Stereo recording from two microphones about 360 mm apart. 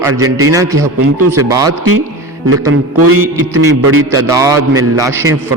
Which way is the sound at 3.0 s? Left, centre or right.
Right.